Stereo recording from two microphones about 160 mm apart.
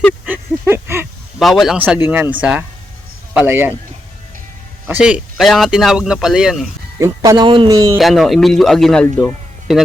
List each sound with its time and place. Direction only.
0.3 s a sound: 15° right (ahead or behind)
1.4 s speech: centre (ahead or behind)
4.9 s speech: 5° right (ahead or behind)
7.0 s speech: 20° right (ahead or behind)
7.9 s speech: centre (ahead or behind)